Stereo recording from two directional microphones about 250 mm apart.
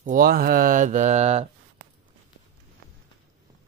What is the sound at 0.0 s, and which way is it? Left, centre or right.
Speech, right.